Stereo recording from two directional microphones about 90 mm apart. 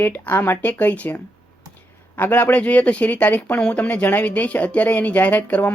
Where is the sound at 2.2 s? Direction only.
20° left (ahead or behind).